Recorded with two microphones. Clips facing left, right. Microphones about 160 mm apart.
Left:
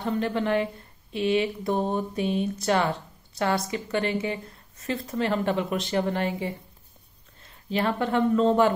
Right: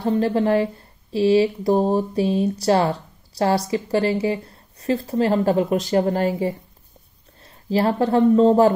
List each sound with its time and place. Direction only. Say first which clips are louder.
0.0 s speech: right 7 dB; 35° right (ahead or behind)